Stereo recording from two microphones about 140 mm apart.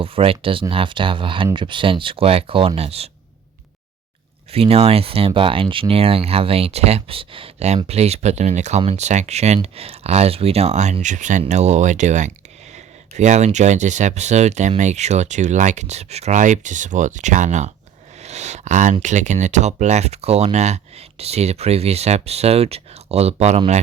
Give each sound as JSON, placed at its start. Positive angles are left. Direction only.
{"t": 0.0, "sound": "speech", "side_deg": -40}
{"t": 4.5, "sound": "speech", "side_deg": -45}